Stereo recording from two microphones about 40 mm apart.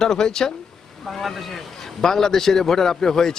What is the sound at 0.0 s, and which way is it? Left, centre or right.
Speech, centre.